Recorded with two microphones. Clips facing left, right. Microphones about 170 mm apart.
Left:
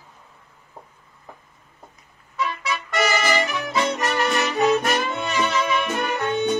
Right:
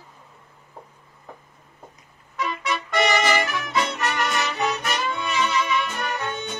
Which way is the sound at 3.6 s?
35° left (ahead or behind).